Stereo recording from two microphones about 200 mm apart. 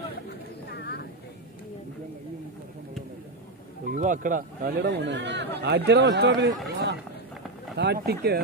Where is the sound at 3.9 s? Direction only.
40° right (ahead or behind).